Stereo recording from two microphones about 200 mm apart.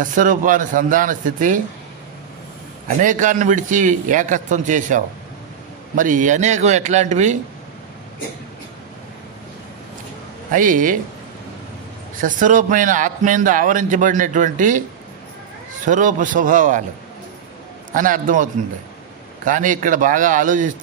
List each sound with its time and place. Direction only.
0.0 s a man's voice: 40° right (ahead or behind)
3.0 s a man's voice: 40° right (ahead or behind)
10.5 s a man's voice: 40° right (ahead or behind)
12.2 s a man's voice: 40° right (ahead or behind)
17.9 s a man's voice: 40° right (ahead or behind)